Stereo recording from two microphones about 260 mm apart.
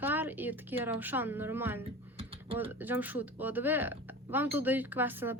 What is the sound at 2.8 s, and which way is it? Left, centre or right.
Speech, centre.